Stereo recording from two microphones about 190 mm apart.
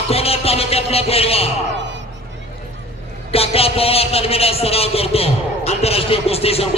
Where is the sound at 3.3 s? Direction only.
30° left (ahead or behind).